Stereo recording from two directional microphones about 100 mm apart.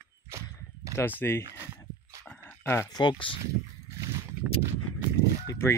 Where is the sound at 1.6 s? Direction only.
30° right (ahead or behind).